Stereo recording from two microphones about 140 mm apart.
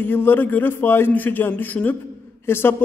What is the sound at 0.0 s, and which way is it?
A man's voice, 15° left (ahead or behind).